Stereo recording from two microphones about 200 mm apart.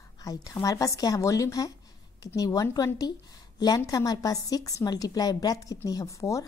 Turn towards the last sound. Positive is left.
turn(degrees=15)  # may be behind; listen again after turning